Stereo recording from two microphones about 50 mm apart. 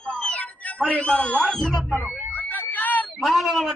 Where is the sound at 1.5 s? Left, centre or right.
Centre.